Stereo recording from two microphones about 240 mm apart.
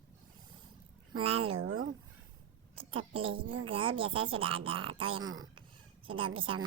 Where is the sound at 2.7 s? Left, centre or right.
Right.